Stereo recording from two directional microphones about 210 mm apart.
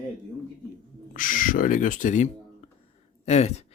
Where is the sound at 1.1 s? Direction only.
40° left (ahead or behind).